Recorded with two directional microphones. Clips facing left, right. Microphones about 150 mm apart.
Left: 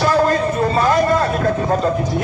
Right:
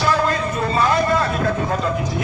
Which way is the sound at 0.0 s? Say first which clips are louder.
Left 4 dB; 40° left (ahead or behind).